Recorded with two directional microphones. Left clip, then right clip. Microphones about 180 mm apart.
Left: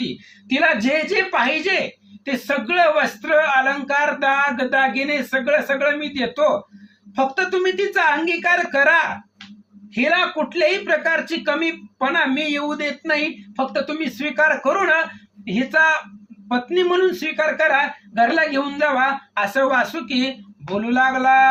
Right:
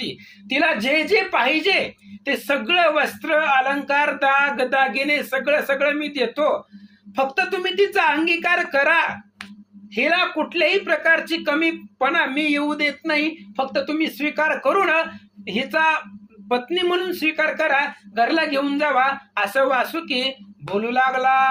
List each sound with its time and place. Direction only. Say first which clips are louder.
0.0 s speech: left 1 dB; 50° right (ahead or behind)